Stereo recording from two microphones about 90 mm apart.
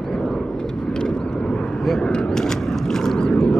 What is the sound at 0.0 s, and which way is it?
Vehicle, 5° left (ahead or behind).